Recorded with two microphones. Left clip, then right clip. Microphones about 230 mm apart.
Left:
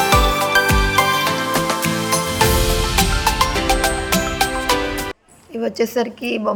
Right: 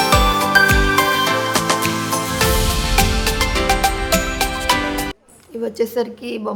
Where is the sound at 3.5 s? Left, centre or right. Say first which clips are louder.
Right 1 dB; centre.